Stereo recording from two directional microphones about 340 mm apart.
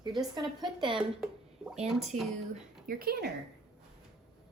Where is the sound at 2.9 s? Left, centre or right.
Right.